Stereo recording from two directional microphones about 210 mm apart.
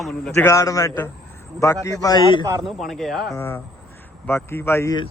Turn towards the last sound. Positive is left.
turn(degrees=15)  # may be behind; listen again after turning